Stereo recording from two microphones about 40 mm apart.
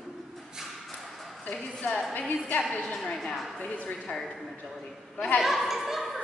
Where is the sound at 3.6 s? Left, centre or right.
Left.